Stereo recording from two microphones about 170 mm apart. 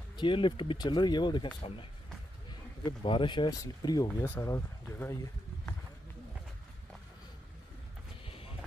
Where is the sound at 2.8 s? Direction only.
30° left (ahead or behind).